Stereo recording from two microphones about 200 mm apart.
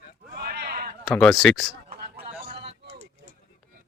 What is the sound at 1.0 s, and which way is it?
Speech, centre (ahead or behind).